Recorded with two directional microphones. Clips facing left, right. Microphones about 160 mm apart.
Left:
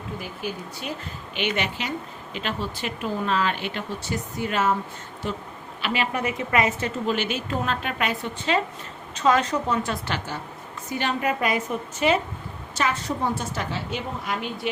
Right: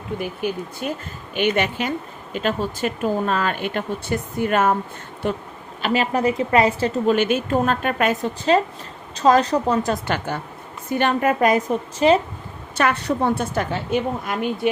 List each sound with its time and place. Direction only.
0.2 s a woman's voice: 55° right (ahead or behind)
5.8 s a woman's voice: 40° right (ahead or behind)
7.1 s a woman's voice: 50° right (ahead or behind); by 12.2 s 35° right (ahead or behind)
12.7 s a woman's voice: 60° right (ahead or behind)